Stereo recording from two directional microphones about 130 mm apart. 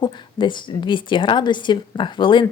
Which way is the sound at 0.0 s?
35° left (ahead or behind).